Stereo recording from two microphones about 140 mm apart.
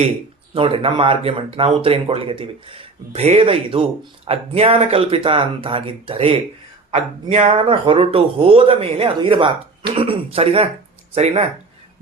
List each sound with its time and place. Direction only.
0.5 s speech: 40° right (ahead or behind)